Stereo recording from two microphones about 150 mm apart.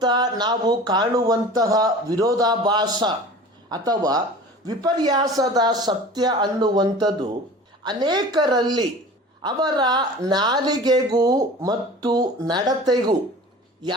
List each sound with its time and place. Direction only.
0.0 s speech: 30° right (ahead or behind)